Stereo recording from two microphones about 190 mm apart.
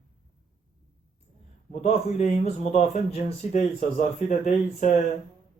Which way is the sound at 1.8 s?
40° left (ahead or behind).